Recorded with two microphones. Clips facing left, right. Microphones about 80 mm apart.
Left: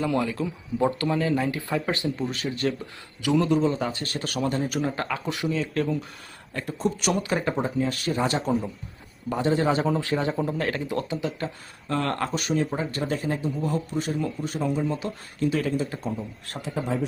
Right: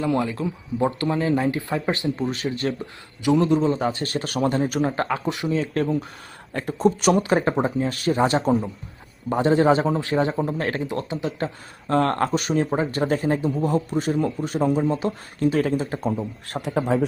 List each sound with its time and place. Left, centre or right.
0.0 s a man's voice: right
3.6 s a man's voice: right
16.6 s speech: right